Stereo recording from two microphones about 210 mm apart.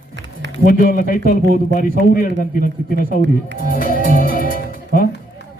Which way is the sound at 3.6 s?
45° left (ahead or behind).